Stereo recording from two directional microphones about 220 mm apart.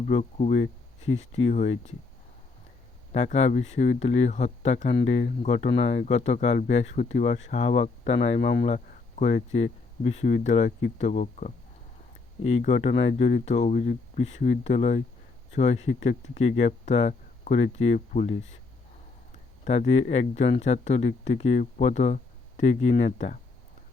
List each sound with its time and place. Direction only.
0.0 s speech: 30° left (ahead or behind)
3.1 s speech: 30° left (ahead or behind)
8.4 s speech: 50° left (ahead or behind)
8.6 s cricket: 30° left (ahead or behind)
9.5 s speech: 30° left (ahead or behind)
19.6 s speech: 30° left (ahead or behind)